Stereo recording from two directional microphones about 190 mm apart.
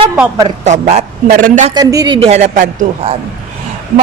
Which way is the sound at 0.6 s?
35° right (ahead or behind).